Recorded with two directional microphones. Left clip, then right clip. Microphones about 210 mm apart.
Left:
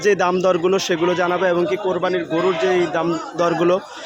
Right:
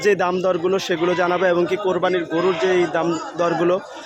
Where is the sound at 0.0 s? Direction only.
5° left (ahead or behind).